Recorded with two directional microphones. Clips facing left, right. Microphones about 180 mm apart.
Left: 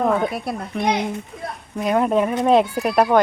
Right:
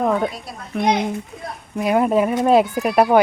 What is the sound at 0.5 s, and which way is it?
Speech, 60° left (ahead or behind).